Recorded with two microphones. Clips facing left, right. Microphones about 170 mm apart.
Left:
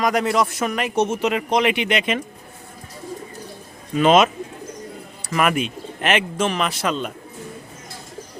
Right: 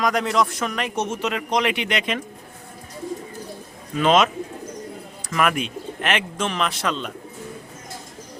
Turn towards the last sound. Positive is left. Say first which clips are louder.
# left 2 dB
turn(degrees=5)  # may be behind; listen again after turning